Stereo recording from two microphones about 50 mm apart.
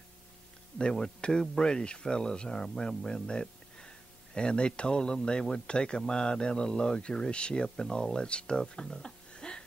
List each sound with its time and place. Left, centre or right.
0.7 s speech: centre